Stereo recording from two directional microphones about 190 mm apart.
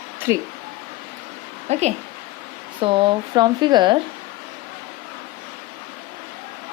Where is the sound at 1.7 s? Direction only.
35° right (ahead or behind).